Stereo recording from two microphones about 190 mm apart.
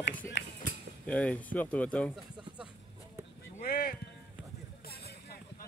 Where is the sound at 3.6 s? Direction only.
50° left (ahead or behind).